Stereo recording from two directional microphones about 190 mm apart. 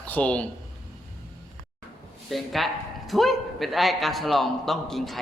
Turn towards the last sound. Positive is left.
turn(degrees=0)  # may be behind; listen again after turning